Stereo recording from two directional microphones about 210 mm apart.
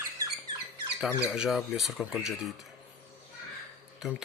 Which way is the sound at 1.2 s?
5° right (ahead or behind).